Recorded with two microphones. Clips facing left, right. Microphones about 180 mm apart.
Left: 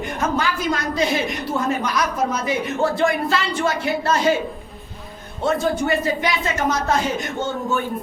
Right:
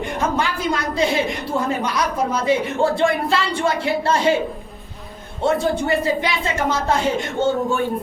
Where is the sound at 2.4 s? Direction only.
25° right (ahead or behind).